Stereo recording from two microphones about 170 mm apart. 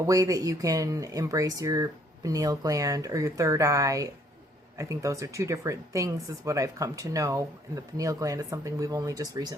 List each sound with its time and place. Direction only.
0.0 s speech: 20° right (ahead or behind)